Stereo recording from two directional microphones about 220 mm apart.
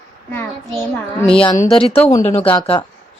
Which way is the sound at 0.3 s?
5° left (ahead or behind).